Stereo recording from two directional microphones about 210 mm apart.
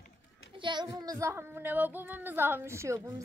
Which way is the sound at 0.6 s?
20° right (ahead or behind).